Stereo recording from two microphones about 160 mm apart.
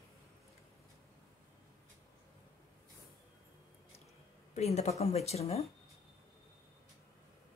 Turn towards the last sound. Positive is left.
turn(degrees=40)  # may be behind; listen again after turning